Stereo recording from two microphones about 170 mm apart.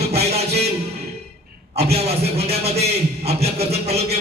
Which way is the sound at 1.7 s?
35° right (ahead or behind).